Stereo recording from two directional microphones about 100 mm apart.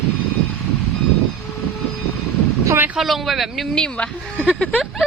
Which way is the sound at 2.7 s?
20° right (ahead or behind).